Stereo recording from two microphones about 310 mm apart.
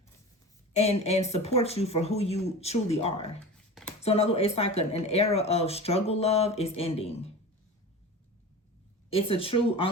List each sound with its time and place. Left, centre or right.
0.8 s speech: centre
9.0 s speech: centre